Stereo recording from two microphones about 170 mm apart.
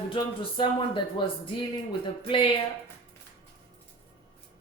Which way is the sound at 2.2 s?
30° left (ahead or behind).